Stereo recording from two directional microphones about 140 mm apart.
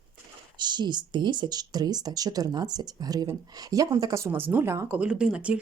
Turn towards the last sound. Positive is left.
turn(degrees=-10)  # may be behind; listen again after turning